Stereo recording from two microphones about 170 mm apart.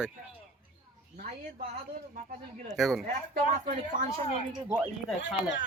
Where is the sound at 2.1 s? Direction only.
50° right (ahead or behind).